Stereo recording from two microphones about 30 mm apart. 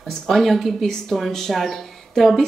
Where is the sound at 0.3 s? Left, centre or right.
Centre.